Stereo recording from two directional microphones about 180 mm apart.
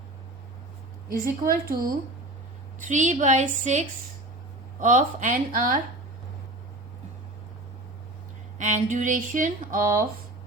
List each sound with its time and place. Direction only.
1.2 s speech: 55° right (ahead or behind)
2.8 s speech: 45° right (ahead or behind)
8.5 s speech: 40° right (ahead or behind)